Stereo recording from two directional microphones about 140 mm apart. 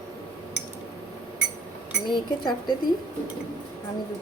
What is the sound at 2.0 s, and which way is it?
Speech, 30° left (ahead or behind).